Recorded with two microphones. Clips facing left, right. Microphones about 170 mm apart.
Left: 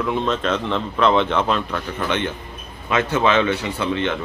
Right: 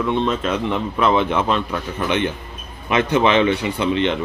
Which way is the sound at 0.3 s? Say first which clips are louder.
Even; 10° right (ahead or behind).